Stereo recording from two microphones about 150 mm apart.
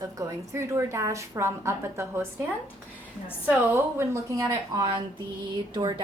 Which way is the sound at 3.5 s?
15° right (ahead or behind).